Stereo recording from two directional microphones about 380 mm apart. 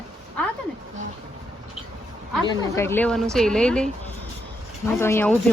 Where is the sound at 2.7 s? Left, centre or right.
Centre.